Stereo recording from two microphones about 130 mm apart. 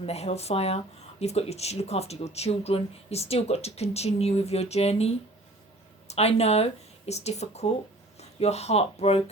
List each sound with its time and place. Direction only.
0.0 s speech: 55° left (ahead or behind)